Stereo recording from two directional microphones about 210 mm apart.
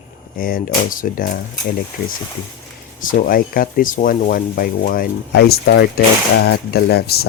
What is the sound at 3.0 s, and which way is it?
Speech, 40° left (ahead or behind).